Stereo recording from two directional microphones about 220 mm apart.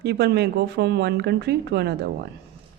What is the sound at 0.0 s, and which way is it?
Speech, 50° right (ahead or behind).